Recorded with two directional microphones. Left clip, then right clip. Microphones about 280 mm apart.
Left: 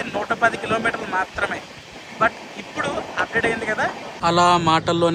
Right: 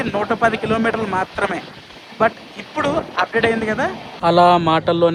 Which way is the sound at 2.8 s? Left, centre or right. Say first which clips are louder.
Right 5 dB; centre.